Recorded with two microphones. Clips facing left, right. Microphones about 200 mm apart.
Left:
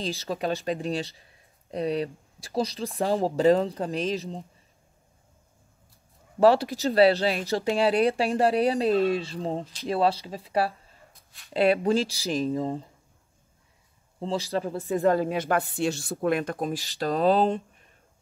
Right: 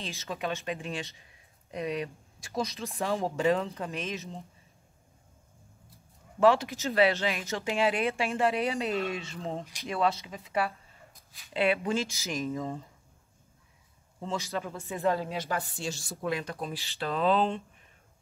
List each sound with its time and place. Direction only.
0.0 s speech: 35° left (ahead or behind)
6.4 s speech: 35° left (ahead or behind)
14.2 s speech: 30° left (ahead or behind)